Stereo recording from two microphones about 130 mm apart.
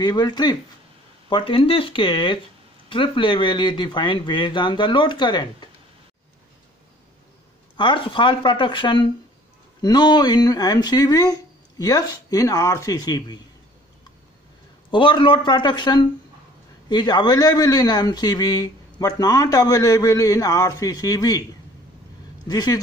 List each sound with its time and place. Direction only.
0.0 s speech: 30° left (ahead or behind)
1.3 s speech: 45° left (ahead or behind)
7.7 s speech: 35° left (ahead or behind)
14.9 s speech: 40° left (ahead or behind)
22.5 s speech: 30° left (ahead or behind)